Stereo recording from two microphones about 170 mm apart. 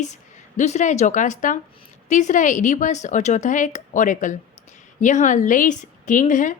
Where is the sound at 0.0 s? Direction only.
45° left (ahead or behind).